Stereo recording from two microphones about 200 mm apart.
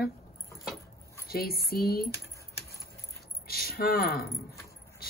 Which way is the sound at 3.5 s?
50° left (ahead or behind).